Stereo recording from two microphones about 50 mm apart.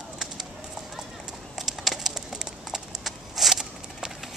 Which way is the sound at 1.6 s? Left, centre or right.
Centre.